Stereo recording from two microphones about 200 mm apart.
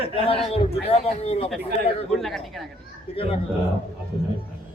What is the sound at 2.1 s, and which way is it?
Speech, centre (ahead or behind).